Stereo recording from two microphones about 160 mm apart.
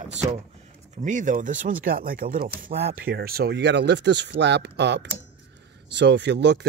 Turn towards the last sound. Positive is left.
turn(degrees=-90)